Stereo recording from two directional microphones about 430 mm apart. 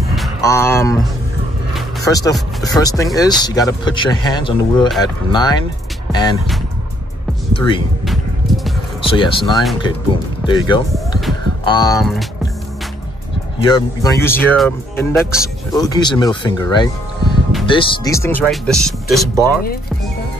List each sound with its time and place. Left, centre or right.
0.1 s a sound: centre
1.7 s speech: centre
9.0 s speech: centre
11.6 s music: centre
12.0 s speech: centre
13.6 s speech: centre